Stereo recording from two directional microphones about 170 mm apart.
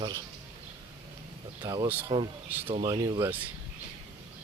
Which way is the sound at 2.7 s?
35° right (ahead or behind).